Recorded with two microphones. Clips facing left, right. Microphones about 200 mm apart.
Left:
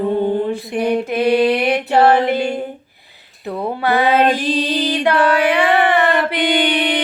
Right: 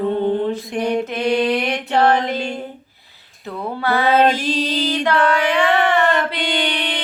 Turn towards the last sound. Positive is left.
turn(degrees=15)  # may be behind; listen again after turning